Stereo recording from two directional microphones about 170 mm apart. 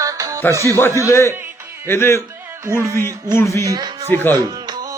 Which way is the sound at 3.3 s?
15° left (ahead or behind).